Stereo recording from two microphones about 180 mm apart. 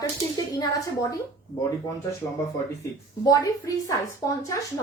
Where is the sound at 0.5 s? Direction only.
20° left (ahead or behind).